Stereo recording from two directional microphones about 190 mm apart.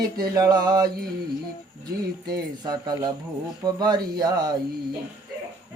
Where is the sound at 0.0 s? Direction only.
20° right (ahead or behind).